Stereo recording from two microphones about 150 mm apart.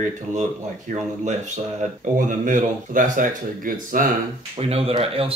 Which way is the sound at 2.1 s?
60° right (ahead or behind).